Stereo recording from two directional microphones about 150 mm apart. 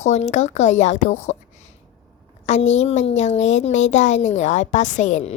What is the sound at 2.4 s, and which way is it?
Speech, 45° left (ahead or behind).